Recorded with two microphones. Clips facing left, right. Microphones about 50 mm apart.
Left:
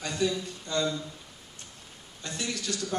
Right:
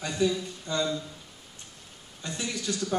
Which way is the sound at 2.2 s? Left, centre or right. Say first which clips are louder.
Right 1 dB; centre.